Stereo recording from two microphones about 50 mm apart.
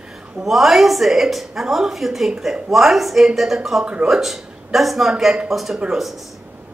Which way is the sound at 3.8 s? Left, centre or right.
Right.